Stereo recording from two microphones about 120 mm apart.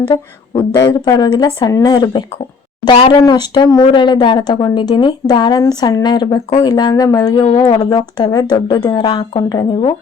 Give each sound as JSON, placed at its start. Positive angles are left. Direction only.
{"t": 0.1, "sound": "speech", "side_deg": 40}